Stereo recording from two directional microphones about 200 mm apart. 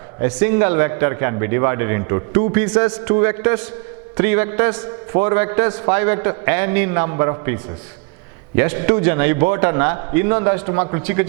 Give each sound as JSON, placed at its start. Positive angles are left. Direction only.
{"t": 0.2, "sound": "a man's voice", "side_deg": -10}